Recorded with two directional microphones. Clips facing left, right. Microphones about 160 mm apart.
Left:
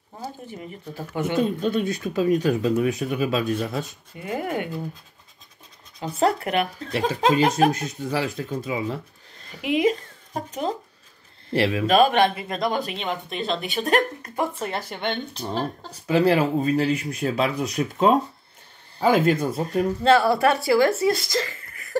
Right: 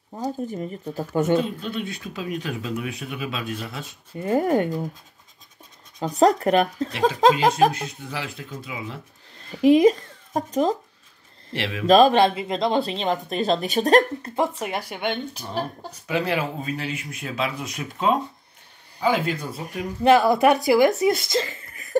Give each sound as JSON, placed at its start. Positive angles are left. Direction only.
{"t": 0.5, "sound": "speech", "side_deg": -40}
{"t": 1.6, "sound": "speech", "side_deg": 45}
{"t": 4.1, "sound": "speech", "side_deg": -35}
{"t": 6.0, "sound": "speech", "side_deg": -40}
{"t": 7.7, "sound": "speech", "side_deg": 40}
{"t": 9.5, "sound": "a woman's voice", "side_deg": -35}
{"t": 11.5, "sound": "speech", "side_deg": 40}
{"t": 11.9, "sound": "speech", "side_deg": -30}
{"t": 14.3, "sound": "speech", "side_deg": -20}
{"t": 15.9, "sound": "speech", "side_deg": 35}
{"t": 20.0, "sound": "speech", "side_deg": -20}